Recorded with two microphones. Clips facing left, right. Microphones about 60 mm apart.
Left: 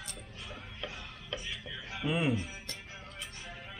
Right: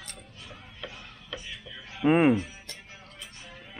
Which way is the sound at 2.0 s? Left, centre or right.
Right.